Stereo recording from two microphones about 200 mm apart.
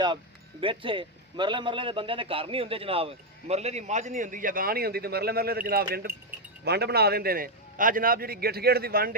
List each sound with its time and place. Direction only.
0.6 s a man's voice: 25° right (ahead or behind); by 9.1 s 50° right (ahead or behind)